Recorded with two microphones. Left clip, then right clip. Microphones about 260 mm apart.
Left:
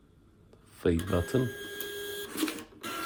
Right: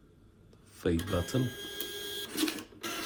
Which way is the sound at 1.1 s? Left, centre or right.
Left.